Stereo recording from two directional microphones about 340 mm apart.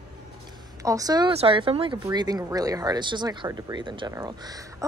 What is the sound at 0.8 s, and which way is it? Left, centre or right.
Speech, centre.